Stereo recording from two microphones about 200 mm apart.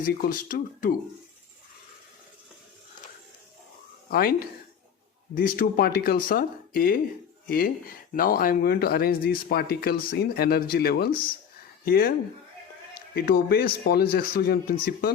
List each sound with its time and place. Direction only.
0.0 s speech: 45° left (ahead or behind)
4.1 s speech: 50° left (ahead or behind)